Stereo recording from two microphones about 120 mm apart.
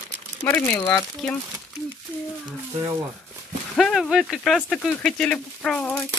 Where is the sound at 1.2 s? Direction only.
5° left (ahead or behind).